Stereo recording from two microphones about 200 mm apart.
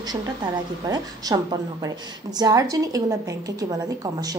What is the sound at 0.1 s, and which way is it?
A woman's voice, 20° right (ahead or behind).